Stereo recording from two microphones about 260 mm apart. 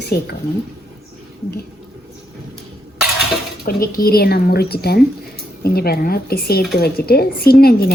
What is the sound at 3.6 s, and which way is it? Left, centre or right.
A woman's voice, left.